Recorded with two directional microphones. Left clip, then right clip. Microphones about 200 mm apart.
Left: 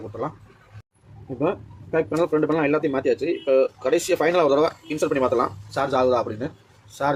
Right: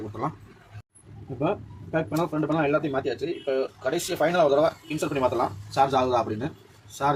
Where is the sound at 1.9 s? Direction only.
35° left (ahead or behind).